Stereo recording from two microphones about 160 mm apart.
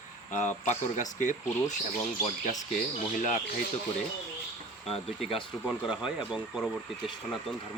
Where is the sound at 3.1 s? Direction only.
50° left (ahead or behind).